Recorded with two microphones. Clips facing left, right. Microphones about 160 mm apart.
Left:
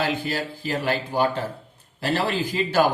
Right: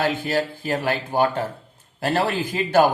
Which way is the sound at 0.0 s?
50° right (ahead or behind).